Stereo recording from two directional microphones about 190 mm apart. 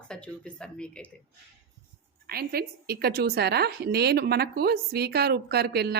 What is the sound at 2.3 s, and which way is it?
A woman's voice, 55° right (ahead or behind).